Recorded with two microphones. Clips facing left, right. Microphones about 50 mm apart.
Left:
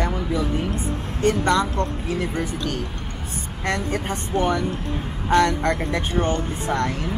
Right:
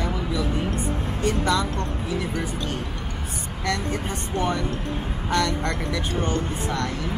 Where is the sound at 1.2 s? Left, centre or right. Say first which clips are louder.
Left 4 dB; left.